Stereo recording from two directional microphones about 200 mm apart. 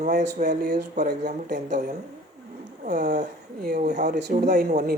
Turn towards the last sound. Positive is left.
turn(degrees=-45)  # may be behind; listen again after turning